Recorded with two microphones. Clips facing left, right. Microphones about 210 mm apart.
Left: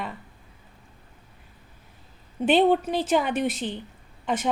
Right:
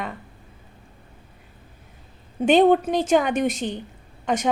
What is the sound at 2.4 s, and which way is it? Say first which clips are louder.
A woman's voice: right 4 dB; 45° right (ahead or behind).